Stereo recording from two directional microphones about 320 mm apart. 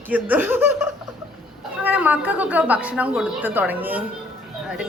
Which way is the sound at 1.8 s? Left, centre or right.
Centre.